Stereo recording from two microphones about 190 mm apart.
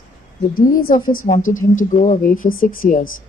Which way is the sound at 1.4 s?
90° left.